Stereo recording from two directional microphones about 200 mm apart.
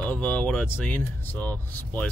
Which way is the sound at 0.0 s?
5° left (ahead or behind).